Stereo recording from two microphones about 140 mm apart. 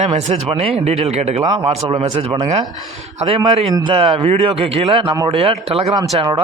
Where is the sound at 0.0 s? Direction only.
50° right (ahead or behind).